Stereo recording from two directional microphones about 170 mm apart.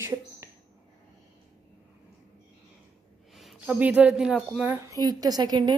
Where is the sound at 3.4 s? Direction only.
5° right (ahead or behind).